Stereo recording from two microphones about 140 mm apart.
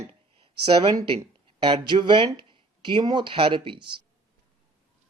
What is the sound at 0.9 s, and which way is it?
Speech, 30° right (ahead or behind).